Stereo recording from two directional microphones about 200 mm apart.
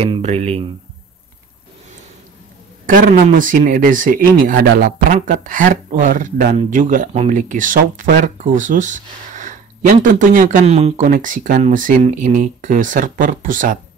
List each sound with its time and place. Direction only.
0.0 s speech: 30° right (ahead or behind)
2.9 s speech: 40° right (ahead or behind)